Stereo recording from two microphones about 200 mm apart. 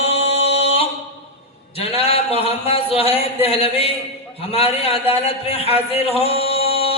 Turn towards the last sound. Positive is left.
turn(degrees=30)  # may be behind; listen again after turning